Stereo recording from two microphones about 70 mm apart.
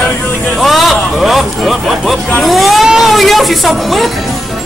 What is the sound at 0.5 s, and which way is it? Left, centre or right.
Speech, centre.